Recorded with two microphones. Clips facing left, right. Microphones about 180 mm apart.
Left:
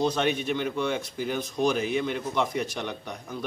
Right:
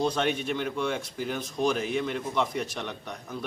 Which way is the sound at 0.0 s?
Centre (ahead or behind).